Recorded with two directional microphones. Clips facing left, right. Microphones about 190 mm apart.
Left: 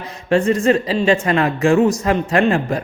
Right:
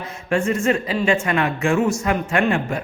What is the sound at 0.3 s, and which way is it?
Speech, 35° left (ahead or behind).